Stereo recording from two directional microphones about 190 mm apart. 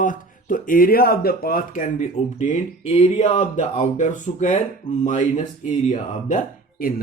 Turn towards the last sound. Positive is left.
turn(degrees=50)  # may be behind; listen again after turning